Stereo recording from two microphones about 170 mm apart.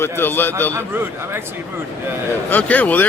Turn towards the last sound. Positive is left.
turn(degrees=10)  # may be behind; listen again after turning